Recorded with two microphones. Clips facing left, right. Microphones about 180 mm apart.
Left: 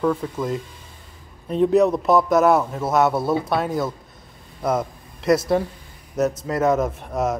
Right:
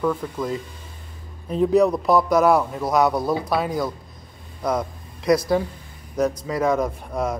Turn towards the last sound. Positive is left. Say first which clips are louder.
# left 2 dB
turn(degrees=5)  # may be behind; listen again after turning